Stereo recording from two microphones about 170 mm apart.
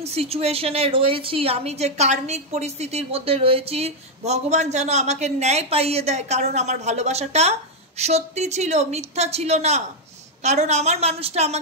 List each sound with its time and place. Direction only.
0.0 s a woman's voice: 35° right (ahead or behind)